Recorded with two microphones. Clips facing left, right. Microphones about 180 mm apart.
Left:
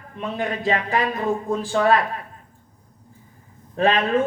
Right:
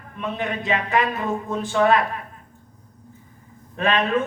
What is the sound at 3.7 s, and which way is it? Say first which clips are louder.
Speech: left 2 dB; 35° left (ahead or behind).